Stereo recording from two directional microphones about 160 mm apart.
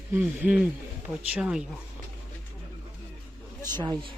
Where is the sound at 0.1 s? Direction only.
10° right (ahead or behind).